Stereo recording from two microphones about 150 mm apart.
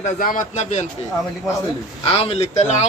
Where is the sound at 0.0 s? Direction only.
60° left (ahead or behind).